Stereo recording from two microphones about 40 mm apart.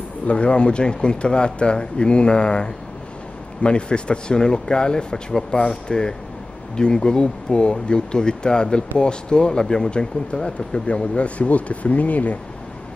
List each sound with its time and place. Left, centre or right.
0.3 s speech: left